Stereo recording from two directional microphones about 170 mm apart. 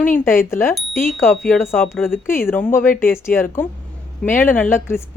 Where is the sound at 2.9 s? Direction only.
55° left (ahead or behind).